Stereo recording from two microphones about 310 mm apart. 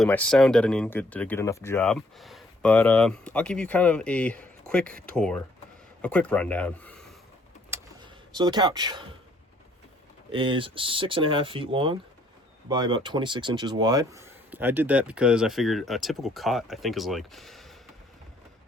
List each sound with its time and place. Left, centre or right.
0.0 s speech: centre
7.7 s a sound: centre
10.3 s speech: centre